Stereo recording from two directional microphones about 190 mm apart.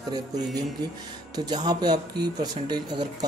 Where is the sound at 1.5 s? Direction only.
20° right (ahead or behind).